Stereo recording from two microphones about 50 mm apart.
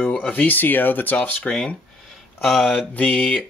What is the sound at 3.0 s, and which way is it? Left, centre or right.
Speech, left.